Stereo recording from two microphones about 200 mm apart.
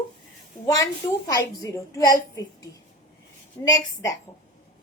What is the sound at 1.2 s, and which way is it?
Speech, 15° left (ahead or behind).